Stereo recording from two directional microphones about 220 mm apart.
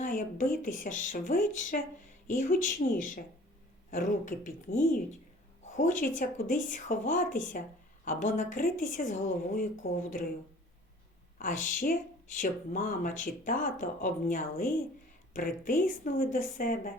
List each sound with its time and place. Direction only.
0.0 s speech: 35° left (ahead or behind)
11.3 s speech: 35° left (ahead or behind)